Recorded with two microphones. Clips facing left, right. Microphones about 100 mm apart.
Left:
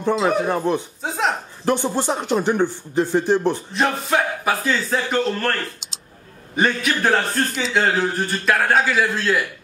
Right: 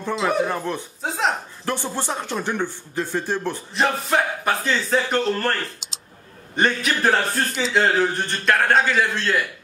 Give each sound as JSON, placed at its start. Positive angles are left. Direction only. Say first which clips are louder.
{"t": 0.2, "sound": "speech", "louder": "left 3 dB", "side_deg": 20}
{"t": 1.0, "sound": "a man's voice", "louder": "right 1 dB", "side_deg": 0}
{"t": 1.7, "sound": "speech", "louder": "left 6 dB", "side_deg": 15}
{"t": 3.7, "sound": "a man's voice", "louder": "right 3 dB", "side_deg": 0}